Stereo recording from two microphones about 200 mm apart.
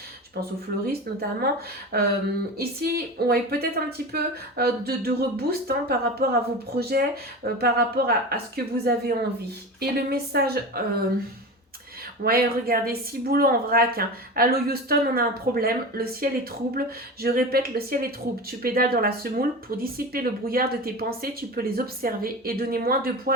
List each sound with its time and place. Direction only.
0.9 s speech: 50° right (ahead or behind)
12.2 s speech: 50° right (ahead or behind)